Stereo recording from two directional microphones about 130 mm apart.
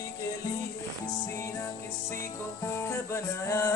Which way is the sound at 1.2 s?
20° left (ahead or behind).